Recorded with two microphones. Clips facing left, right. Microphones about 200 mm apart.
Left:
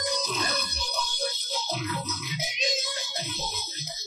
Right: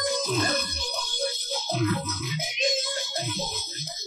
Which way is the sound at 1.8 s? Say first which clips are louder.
Right 6 dB; 50° right (ahead or behind).